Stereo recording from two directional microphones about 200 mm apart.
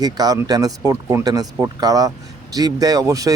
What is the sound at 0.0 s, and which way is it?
Speech, 20° right (ahead or behind).